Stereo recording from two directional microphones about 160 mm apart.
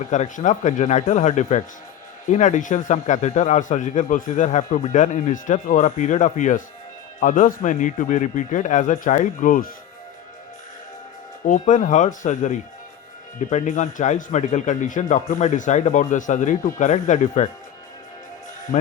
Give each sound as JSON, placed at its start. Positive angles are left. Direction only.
{"t": 0.1, "sound": "a man's voice", "side_deg": 50}
{"t": 11.4, "sound": "a man's voice", "side_deg": 50}
{"t": 18.7, "sound": "speech", "side_deg": 50}